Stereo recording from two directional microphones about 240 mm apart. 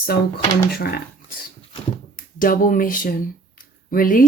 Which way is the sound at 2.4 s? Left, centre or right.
Left.